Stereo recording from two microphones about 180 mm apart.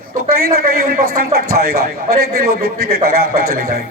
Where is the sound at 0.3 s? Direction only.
55° right (ahead or behind).